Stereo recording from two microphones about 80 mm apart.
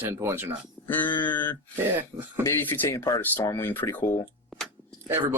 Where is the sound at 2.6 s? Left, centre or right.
Left.